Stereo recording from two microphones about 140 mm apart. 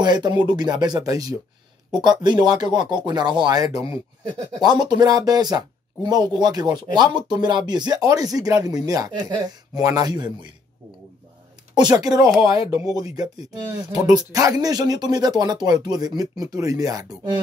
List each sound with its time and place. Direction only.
0.0 s speech: 30° right (ahead or behind)
11.7 s speech: 30° right (ahead or behind)